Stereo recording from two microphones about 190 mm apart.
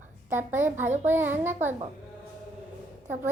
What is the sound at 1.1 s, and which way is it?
Speech, 10° right (ahead or behind).